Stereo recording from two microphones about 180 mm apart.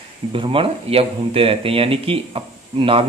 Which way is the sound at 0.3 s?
30° right (ahead or behind).